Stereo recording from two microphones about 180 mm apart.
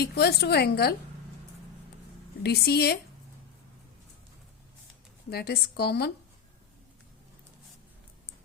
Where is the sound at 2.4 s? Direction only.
65° left (ahead or behind).